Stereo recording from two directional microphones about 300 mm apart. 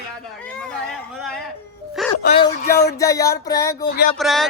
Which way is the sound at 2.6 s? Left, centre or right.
Left.